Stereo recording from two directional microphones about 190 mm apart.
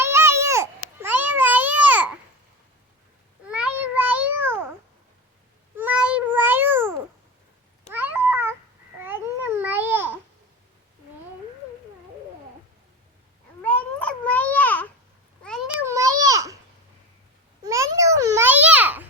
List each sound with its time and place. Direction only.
0.0 s babbling: 15° right (ahead or behind)
3.4 s a sound: 5° right (ahead or behind)
5.7 s cat: 10° right (ahead or behind)
7.9 s cat: 10° right (ahead or behind)
9.0 s babbling: 10° right (ahead or behind)
13.6 s cat: 5° left (ahead or behind)
15.9 s a sound: 15° right (ahead or behind)
17.6 s babbling: 15° right (ahead or behind)